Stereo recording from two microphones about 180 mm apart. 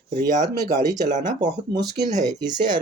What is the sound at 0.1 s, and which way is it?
Speech, 55° right (ahead or behind).